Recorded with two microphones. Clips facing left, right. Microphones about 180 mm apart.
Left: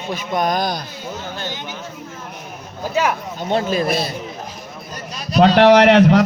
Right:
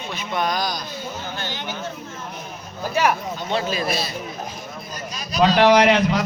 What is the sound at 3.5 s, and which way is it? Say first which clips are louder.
Speech: left 6 dB; 50° left (ahead or behind).